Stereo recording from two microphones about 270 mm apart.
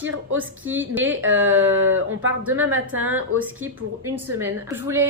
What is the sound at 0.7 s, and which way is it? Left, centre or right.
Speech, centre.